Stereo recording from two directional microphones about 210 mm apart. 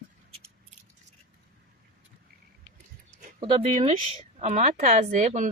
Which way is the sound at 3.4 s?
30° right (ahead or behind).